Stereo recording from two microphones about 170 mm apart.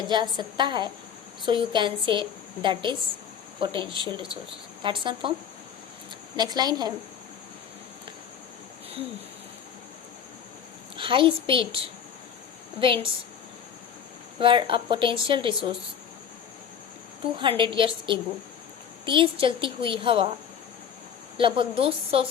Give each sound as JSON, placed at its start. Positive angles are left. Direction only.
{"t": 0.1, "sound": "a woman's voice", "side_deg": -25}
{"t": 6.3, "sound": "a woman's voice", "side_deg": -25}
{"t": 10.9, "sound": "a woman's voice", "side_deg": -30}
{"t": 12.8, "sound": "a woman's voice", "side_deg": -30}
{"t": 14.3, "sound": "a woman's voice", "side_deg": -30}
{"t": 17.6, "sound": "a woman's voice", "side_deg": -30}
{"t": 21.3, "sound": "a woman's voice", "side_deg": -30}